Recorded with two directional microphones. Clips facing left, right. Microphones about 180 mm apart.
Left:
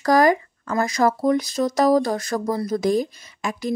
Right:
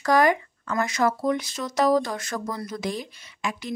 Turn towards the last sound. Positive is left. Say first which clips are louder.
# left 5 dB
turn(degrees=40)  # may be behind; listen again after turning